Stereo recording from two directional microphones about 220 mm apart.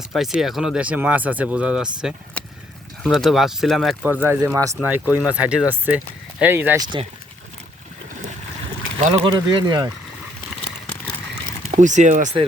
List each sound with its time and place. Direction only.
0.1 s speech: centre (ahead or behind)
9.0 s speech: 25° right (ahead or behind)
11.8 s speech: 35° right (ahead or behind)